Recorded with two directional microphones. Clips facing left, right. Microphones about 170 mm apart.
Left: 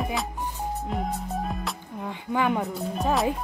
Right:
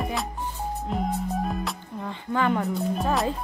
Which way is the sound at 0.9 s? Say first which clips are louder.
Right 5 dB; centre (ahead or behind).